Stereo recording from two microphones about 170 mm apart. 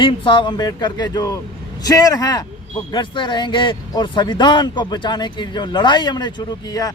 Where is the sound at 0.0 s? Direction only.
30° left (ahead or behind).